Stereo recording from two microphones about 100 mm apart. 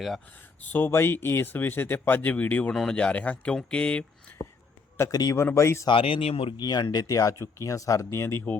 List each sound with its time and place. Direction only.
0.6 s speech: 20° left (ahead or behind)
4.9 s speech: 35° left (ahead or behind)
5.9 s speech: 65° left (ahead or behind); by 6.5 s 85° left
6.6 s speech: 40° left (ahead or behind)